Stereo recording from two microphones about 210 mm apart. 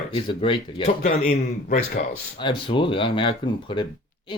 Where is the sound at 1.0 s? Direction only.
40° left (ahead or behind).